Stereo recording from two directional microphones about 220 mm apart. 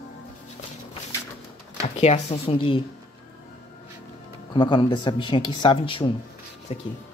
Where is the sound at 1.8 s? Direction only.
30° left (ahead or behind).